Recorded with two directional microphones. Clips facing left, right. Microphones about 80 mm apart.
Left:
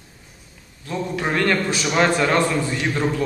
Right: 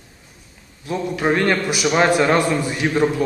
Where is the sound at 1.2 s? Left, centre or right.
Centre.